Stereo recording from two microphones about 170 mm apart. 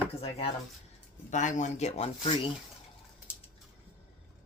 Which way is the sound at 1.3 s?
45° left (ahead or behind).